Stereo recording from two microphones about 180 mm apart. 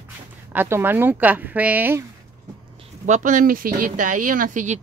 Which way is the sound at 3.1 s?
45° right (ahead or behind).